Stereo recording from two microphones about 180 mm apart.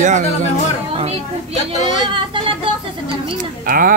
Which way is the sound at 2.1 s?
30° right (ahead or behind).